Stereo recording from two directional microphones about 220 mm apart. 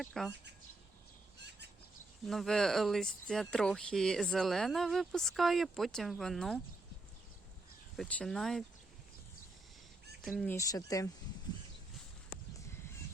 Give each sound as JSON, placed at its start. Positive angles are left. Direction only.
{"t": 0.0, "sound": "speech", "side_deg": 0}
{"t": 1.4, "sound": "bird", "side_deg": -50}
{"t": 2.2, "sound": "speech", "side_deg": 0}
{"t": 7.9, "sound": "speech", "side_deg": 0}
{"t": 10.2, "sound": "speech", "side_deg": 0}
{"t": 10.5, "sound": "speech", "side_deg": 15}